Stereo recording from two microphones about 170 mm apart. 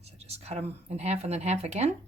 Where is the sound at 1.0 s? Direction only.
40° right (ahead or behind).